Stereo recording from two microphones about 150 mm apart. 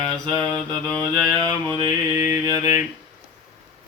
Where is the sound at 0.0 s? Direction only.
25° right (ahead or behind).